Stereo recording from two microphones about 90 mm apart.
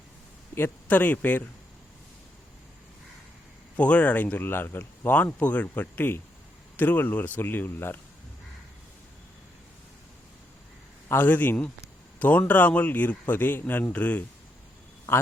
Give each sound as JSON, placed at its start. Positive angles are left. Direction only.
{"t": 0.5, "sound": "speech", "side_deg": 20}
{"t": 3.8, "sound": "speech", "side_deg": 15}
{"t": 11.1, "sound": "speech", "side_deg": 20}